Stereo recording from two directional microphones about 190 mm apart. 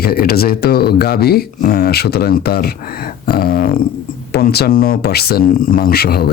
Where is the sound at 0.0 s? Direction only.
55° left (ahead or behind).